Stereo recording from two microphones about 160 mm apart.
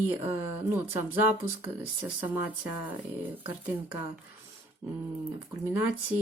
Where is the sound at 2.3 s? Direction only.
10° right (ahead or behind).